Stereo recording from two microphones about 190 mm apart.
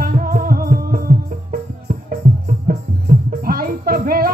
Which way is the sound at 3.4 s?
50° right (ahead or behind).